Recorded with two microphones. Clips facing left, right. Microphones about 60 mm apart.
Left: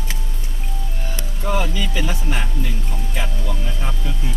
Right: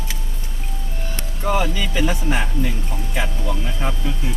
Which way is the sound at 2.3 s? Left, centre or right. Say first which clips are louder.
Right 4 dB; right.